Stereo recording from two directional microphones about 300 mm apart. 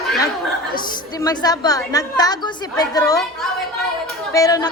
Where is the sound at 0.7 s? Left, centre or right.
Centre.